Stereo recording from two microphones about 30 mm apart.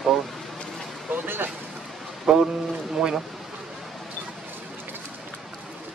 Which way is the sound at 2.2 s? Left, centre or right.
Centre.